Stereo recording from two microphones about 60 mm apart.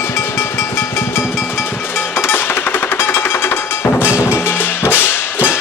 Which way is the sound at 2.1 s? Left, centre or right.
Left.